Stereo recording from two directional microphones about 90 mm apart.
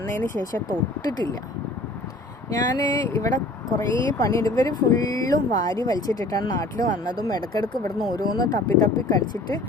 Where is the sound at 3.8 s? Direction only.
35° left (ahead or behind).